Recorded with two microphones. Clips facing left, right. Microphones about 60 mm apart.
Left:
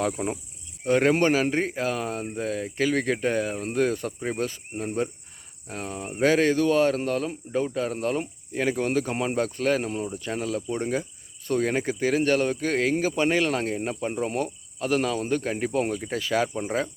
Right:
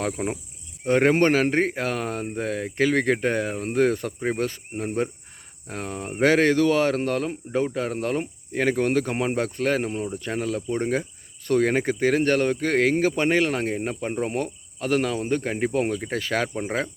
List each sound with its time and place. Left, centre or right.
0.2 s speech: right
0.9 s speech: right
10.2 s speech: right
13.2 s speech: right